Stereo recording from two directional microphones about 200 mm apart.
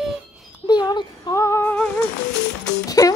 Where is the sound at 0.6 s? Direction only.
20° left (ahead or behind).